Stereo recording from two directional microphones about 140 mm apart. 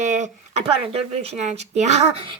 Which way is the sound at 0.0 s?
55° right (ahead or behind).